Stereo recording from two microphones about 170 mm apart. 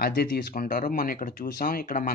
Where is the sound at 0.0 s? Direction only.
65° left (ahead or behind).